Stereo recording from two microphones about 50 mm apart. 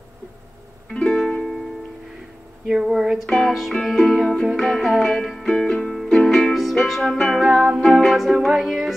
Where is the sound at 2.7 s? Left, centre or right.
Centre.